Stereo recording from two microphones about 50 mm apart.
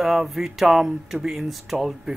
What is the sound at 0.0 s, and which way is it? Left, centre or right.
Speech, centre.